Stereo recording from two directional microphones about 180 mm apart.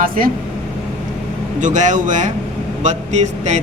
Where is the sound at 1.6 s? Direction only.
45° right (ahead or behind).